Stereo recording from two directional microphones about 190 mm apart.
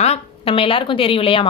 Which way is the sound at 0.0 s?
30° left (ahead or behind).